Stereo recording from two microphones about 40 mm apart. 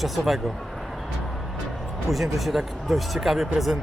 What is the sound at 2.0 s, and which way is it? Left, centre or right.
Speech, centre.